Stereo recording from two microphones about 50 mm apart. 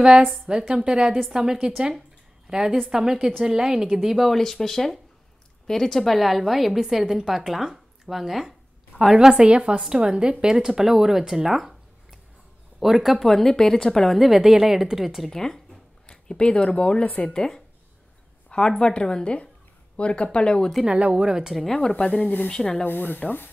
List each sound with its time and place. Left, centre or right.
0.5 s a woman's voice: centre
4.2 s a woman's voice: centre
9.1 s a woman's voice: centre
13.3 s a woman's voice: centre
15.2 s a woman's voice: centre
20.8 s a woman's voice: centre
21.5 s speech: centre
22.8 s speech: left